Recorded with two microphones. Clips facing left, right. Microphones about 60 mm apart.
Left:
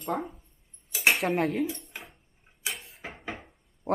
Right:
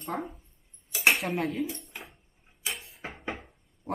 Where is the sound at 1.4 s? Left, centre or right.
Left.